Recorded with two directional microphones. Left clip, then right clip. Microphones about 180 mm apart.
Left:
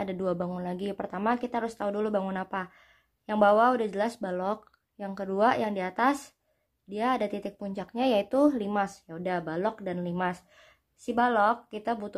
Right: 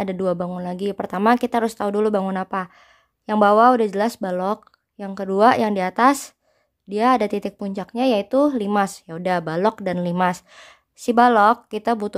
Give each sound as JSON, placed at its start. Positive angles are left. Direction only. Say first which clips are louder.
{"t": 0.0, "sound": "speech", "louder": "right 8 dB", "side_deg": -35}